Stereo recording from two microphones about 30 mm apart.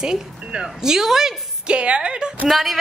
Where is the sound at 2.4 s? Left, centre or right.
Centre.